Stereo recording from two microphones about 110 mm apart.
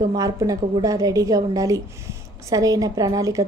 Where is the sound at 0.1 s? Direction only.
35° right (ahead or behind).